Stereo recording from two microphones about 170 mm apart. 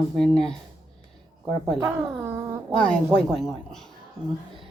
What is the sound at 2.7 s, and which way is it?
A woman's voice, 5° left (ahead or behind).